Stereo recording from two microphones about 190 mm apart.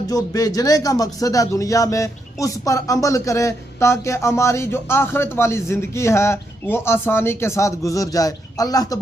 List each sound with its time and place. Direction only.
0.1 s speech: 20° left (ahead or behind)